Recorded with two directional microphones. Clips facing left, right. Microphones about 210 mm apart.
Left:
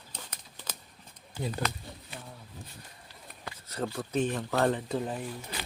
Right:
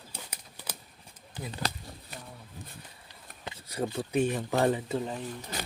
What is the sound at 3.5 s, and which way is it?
Speech, 10° right (ahead or behind).